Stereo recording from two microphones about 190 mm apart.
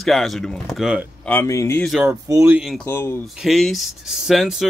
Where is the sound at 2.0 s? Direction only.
15° right (ahead or behind).